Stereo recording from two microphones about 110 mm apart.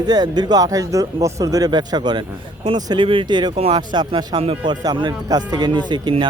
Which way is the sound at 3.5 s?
60° right (ahead or behind).